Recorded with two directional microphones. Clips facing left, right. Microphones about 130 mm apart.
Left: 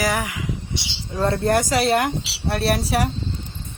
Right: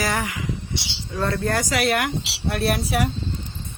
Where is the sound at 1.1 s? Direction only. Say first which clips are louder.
Left 4 dB; 25° left (ahead or behind).